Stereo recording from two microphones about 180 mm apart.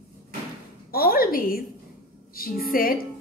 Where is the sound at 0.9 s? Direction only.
55° left (ahead or behind).